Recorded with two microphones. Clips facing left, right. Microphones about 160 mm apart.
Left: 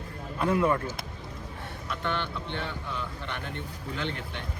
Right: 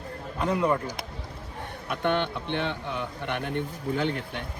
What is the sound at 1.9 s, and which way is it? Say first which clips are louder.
A man's voice: right 6 dB; 60° right (ahead or behind).